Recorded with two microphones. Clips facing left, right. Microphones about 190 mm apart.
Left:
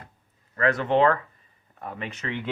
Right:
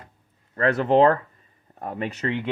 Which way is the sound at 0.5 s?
35° right (ahead or behind).